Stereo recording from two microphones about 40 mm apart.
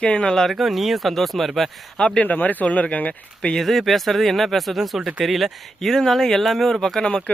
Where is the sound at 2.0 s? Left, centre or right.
Centre.